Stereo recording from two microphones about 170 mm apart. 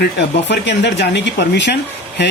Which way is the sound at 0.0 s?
90° left.